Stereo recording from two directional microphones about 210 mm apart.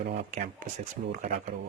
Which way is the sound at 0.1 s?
35° right (ahead or behind).